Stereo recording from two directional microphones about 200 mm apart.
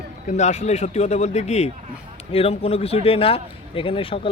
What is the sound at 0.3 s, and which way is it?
A man's voice, 35° left (ahead or behind).